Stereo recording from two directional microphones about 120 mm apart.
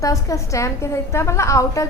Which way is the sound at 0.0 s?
30° left (ahead or behind).